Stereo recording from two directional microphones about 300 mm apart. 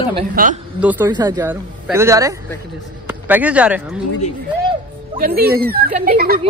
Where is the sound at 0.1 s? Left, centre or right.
Right.